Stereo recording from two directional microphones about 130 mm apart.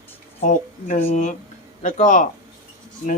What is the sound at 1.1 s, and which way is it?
Speech, 70° left (ahead or behind).